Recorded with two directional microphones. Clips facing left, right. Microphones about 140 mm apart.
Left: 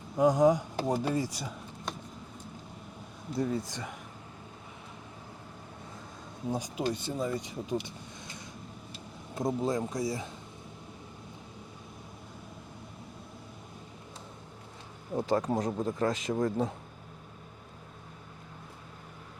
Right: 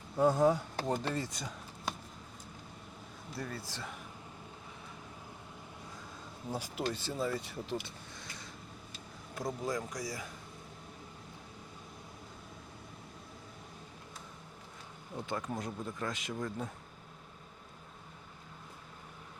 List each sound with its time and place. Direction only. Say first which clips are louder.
0.2 s speech: left 4 dB; 15° left (ahead or behind)
3.3 s speech: left 10 dB; 20° left (ahead or behind)
6.8 s speech: left 2 dB; 15° left (ahead or behind)
9.3 s speech: left 6 dB; 25° left (ahead or behind)
15.1 s speech: left 10 dB; 40° left (ahead or behind)